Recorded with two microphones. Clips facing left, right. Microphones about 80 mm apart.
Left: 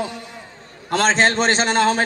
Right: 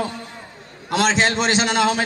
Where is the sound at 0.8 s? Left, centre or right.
Left.